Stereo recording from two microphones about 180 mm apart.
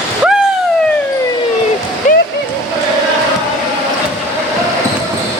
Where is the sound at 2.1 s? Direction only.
45° left (ahead or behind).